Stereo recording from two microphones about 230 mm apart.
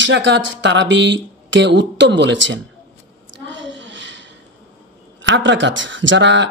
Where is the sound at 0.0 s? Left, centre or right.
Right.